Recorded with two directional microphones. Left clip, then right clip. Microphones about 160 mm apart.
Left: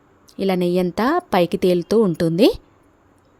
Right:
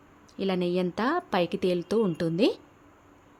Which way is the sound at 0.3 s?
50° left (ahead or behind).